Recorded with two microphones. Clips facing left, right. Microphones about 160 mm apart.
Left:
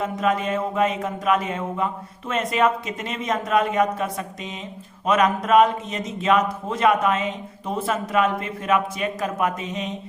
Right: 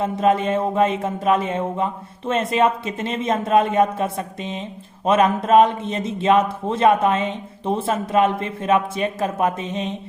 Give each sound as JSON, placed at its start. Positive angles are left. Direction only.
{"t": 0.0, "sound": "a man's voice", "side_deg": -30}